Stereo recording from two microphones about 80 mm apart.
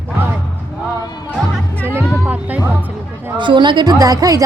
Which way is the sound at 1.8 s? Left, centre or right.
Right.